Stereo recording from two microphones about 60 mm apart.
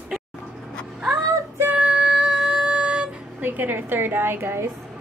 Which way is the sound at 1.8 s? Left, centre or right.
Centre.